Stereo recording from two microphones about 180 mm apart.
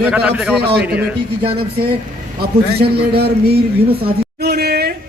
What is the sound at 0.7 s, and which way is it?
Speech, 65° right (ahead or behind).